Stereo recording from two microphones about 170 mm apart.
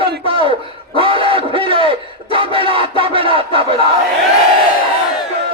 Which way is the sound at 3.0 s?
30° right (ahead or behind).